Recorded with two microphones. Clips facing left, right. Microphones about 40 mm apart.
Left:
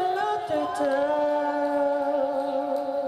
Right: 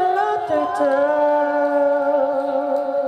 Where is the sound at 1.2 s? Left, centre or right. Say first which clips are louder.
Right 7 dB; centre.